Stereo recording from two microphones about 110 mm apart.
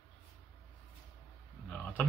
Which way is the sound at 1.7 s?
15° left (ahead or behind).